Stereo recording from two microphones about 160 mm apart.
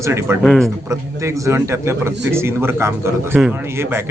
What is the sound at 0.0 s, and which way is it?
Speech, 15° right (ahead or behind).